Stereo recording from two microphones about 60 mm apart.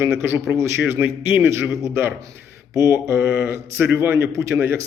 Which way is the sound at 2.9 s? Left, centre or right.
Right.